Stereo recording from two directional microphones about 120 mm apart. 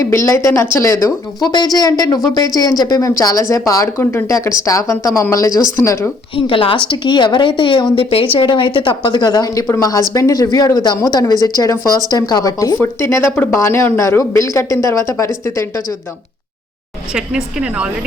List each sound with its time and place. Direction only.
0.0 s a woman's voice: 25° left (ahead or behind)
6.3 s a woman's voice: 45° left (ahead or behind); by 15.6 s 25° left (ahead or behind)
17.2 s speech: 5° right (ahead or behind)